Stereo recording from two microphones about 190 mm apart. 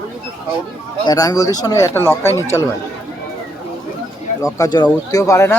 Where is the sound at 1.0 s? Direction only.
20° left (ahead or behind).